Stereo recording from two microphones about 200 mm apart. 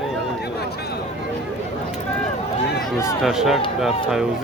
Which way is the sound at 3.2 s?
Centre (ahead or behind).